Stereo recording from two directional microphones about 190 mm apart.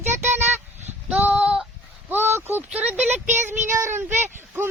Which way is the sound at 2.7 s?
5° right (ahead or behind).